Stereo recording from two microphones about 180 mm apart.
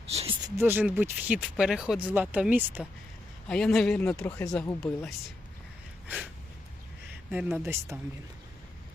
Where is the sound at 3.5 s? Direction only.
Centre (ahead or behind).